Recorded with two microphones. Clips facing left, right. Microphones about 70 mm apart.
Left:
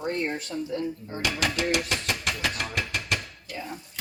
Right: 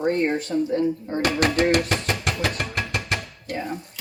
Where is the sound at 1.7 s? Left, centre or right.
Right.